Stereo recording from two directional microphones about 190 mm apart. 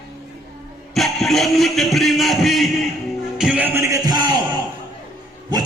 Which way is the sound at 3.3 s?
5° right (ahead or behind).